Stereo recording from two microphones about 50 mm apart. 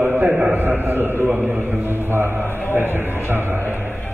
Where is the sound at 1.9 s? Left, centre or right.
Right.